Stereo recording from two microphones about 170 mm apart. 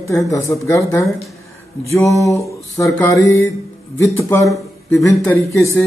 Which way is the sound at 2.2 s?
20° left (ahead or behind).